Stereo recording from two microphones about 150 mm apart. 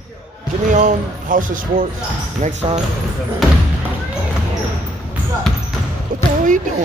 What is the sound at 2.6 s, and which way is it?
Speech, 40° right (ahead or behind).